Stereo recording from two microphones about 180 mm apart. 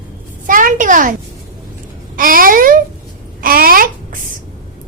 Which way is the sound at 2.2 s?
50° right (ahead or behind).